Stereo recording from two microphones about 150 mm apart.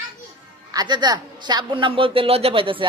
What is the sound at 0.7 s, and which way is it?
A woman's voice, 25° right (ahead or behind).